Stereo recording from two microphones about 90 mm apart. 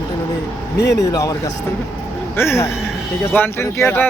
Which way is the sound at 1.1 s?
45° left (ahead or behind).